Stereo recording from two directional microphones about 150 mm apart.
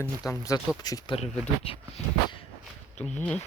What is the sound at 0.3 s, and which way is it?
Speech, 20° left (ahead or behind).